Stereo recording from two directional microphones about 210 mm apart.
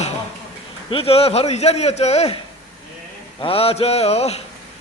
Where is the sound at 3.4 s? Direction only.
25° left (ahead or behind).